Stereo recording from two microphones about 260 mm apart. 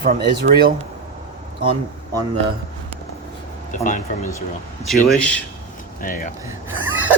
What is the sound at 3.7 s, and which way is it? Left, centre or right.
Speech, left.